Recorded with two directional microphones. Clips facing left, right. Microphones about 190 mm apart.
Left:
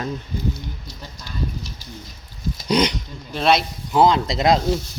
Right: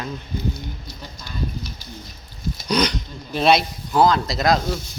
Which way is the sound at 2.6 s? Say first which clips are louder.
Left 2 dB; 25° left (ahead or behind).